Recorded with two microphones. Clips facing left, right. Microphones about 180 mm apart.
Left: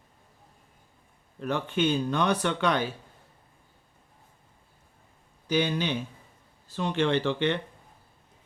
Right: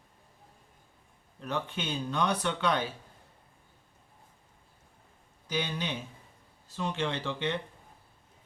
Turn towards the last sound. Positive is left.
turn(degrees=70)  # may be behind; listen again after turning